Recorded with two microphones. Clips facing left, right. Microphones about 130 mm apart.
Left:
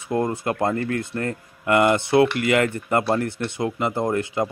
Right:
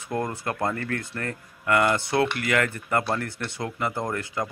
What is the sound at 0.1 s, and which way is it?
Speech, 20° left (ahead or behind).